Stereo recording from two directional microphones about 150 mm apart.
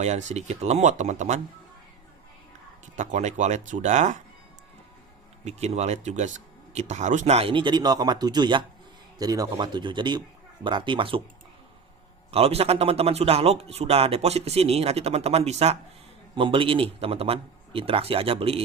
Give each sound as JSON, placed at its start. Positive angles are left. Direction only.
{"t": 0.0, "sound": "a man's voice", "side_deg": -50}
{"t": 2.9, "sound": "a man's voice", "side_deg": -55}
{"t": 5.5, "sound": "a man's voice", "side_deg": -45}
{"t": 12.3, "sound": "a man's voice", "side_deg": -40}